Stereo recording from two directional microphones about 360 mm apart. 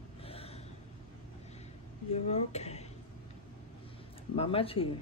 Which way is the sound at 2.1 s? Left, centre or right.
Centre.